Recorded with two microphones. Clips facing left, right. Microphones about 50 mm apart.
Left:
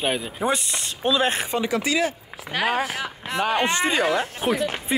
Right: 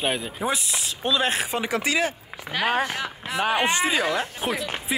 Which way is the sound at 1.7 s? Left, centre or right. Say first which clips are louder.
Even; right.